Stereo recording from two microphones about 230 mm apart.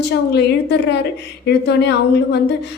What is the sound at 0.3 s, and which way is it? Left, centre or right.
Speech, left.